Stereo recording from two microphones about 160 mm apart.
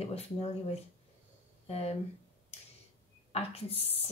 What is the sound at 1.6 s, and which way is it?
Speech, 40° left (ahead or behind).